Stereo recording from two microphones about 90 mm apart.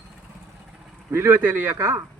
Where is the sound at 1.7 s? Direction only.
30° right (ahead or behind).